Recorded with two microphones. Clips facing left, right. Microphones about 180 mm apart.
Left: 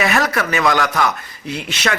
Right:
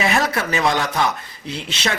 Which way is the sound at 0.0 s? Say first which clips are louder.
Left 2 dB; 25° right (ahead or behind).